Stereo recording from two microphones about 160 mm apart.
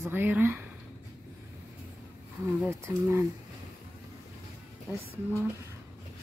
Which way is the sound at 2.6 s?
15° right (ahead or behind).